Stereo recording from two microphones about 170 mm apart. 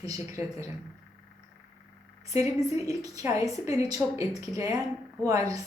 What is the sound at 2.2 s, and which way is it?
A woman's voice, 20° right (ahead or behind).